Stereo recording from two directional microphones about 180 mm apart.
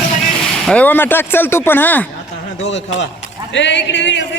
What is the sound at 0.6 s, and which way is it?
A man's voice, 10° left (ahead or behind).